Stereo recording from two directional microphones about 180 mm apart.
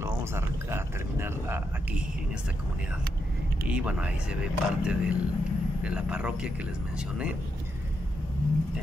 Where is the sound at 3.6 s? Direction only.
5° right (ahead or behind).